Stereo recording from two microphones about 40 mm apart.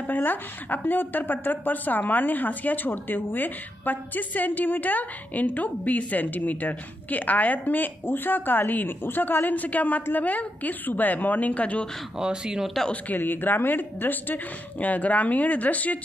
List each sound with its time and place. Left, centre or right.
0.0 s speech: left
12.2 s speech: centre
12.9 s speech: left